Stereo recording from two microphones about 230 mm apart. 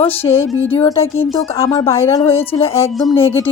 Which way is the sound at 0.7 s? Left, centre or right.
Left.